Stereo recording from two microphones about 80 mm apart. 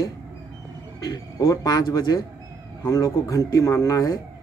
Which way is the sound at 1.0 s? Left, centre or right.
Left.